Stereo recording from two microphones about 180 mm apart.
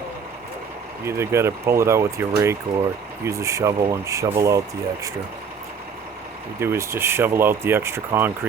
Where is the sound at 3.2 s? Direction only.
15° right (ahead or behind).